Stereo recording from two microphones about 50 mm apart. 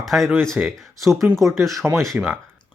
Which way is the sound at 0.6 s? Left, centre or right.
Right.